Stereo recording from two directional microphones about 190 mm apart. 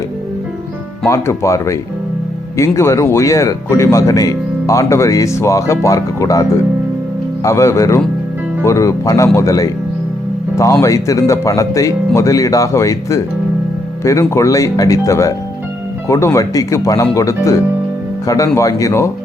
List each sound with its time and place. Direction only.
1.0 s speech: 15° left (ahead or behind)